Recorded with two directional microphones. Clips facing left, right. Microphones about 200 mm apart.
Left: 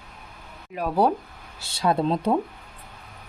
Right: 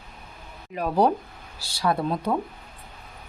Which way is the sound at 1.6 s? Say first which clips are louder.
Left 2 dB; 25° left (ahead or behind).